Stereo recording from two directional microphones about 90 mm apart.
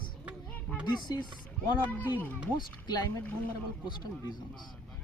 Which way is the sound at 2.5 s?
50° left (ahead or behind).